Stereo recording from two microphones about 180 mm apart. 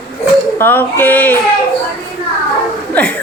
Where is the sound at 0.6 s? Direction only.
10° left (ahead or behind).